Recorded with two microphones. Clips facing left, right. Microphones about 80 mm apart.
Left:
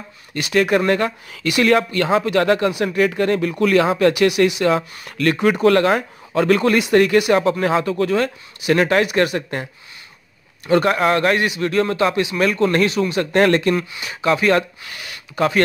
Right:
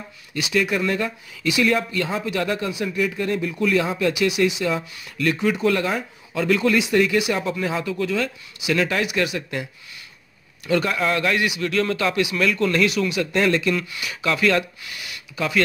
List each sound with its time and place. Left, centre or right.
0.3 s speech: left
7.9 s speech: left
10.7 s speech: left
13.2 s speech: left
13.7 s speech: left